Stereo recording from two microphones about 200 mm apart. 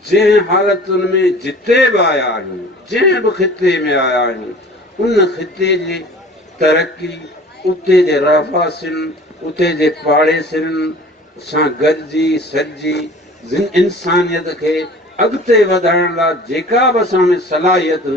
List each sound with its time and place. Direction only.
0.0 s a man's voice: 55° left (ahead or behind)